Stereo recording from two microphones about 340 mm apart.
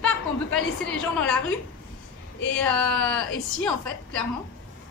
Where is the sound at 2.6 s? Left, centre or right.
Centre.